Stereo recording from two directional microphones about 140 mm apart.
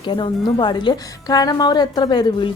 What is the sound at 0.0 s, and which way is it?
A woman's voice, 35° left (ahead or behind).